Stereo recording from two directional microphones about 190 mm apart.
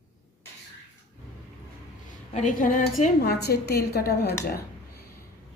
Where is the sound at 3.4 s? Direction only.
55° left (ahead or behind).